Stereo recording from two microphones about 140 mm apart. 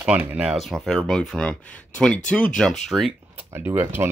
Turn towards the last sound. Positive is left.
turn(degrees=-15)  # may be behind; listen again after turning